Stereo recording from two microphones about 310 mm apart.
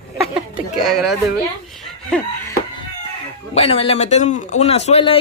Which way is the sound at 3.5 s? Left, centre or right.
Centre.